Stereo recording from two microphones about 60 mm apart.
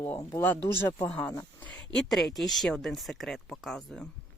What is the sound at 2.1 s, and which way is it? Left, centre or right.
Speech, centre.